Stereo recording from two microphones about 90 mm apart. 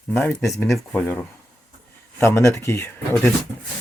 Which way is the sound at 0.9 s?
20° left (ahead or behind).